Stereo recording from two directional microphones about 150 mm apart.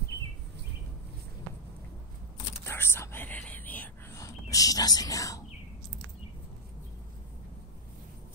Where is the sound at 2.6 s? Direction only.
15° left (ahead or behind).